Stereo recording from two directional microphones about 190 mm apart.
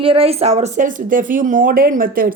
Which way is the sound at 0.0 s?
30° right (ahead or behind).